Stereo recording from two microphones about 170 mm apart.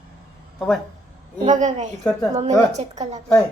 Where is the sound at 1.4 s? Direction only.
45° right (ahead or behind).